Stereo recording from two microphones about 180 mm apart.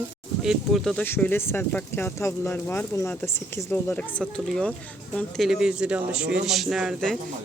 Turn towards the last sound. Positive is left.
turn(degrees=0)  # may be behind; listen again after turning